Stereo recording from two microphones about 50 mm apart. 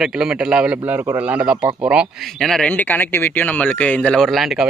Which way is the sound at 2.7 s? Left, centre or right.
Left.